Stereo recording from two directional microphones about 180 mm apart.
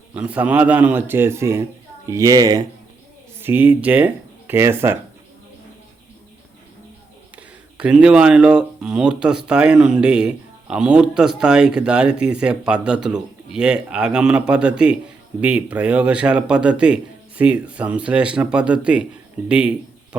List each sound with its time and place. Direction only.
0.1 s speech: 5° right (ahead or behind)
7.8 s speech: 5° right (ahead or behind)